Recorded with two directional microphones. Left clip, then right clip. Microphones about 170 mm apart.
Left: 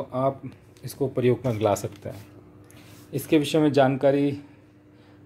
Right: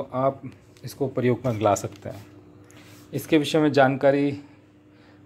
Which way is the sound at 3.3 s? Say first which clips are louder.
Right 1 dB; 15° left (ahead or behind).